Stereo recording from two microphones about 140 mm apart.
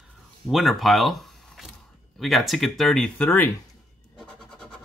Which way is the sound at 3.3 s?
15° left (ahead or behind).